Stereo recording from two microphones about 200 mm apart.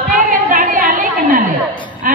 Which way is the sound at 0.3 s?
45° right (ahead or behind).